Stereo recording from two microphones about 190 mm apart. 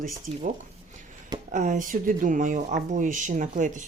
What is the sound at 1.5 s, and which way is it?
Speech, 40° right (ahead or behind).